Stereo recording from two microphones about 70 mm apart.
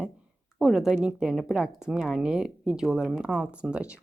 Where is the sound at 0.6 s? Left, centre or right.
Centre.